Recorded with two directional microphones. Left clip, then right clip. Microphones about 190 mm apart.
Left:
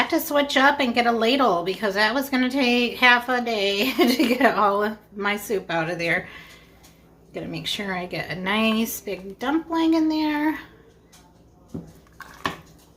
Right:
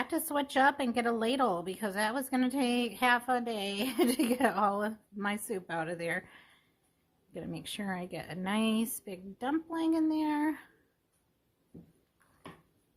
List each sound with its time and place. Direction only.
0.0 s speech: 45° right (ahead or behind)